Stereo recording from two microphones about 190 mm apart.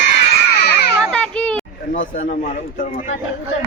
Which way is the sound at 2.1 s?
45° left (ahead or behind).